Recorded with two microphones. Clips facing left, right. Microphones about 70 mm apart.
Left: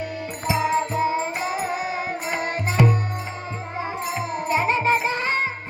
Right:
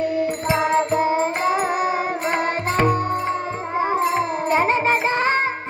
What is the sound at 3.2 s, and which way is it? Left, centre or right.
Music, right.